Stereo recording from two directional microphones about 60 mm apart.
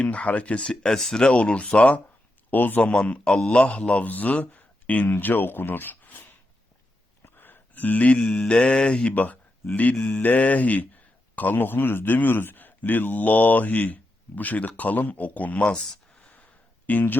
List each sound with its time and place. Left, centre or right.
0.0 s a man's voice: left
2.5 s a man's voice: left
2.9 s a man's voice: centre
5.0 s a man's voice: left
7.3 s mantra: left
10.0 s a man's voice: left
15.8 s a sound: centre
16.3 s a sound: left